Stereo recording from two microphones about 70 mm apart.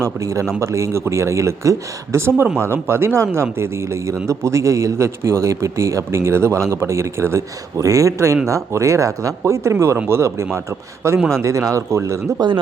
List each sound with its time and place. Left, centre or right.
0.0 s a man's voice: right